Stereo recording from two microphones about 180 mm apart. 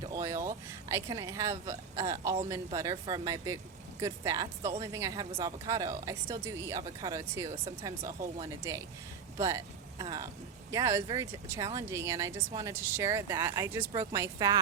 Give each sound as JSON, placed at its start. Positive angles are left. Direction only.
{"t": 0.0, "sound": "speech", "side_deg": -20}